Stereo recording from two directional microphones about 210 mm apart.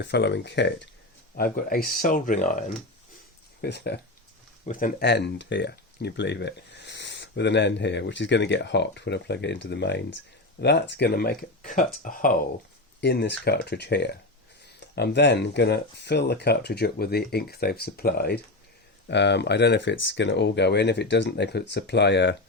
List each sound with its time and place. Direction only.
0.0 s speech: 55° left (ahead or behind)
1.4 s speech: 45° left (ahead or behind)
3.6 s speech: 55° left (ahead or behind)
4.6 s speech: 40° left (ahead or behind)
13.0 s speech: 55° left (ahead or behind)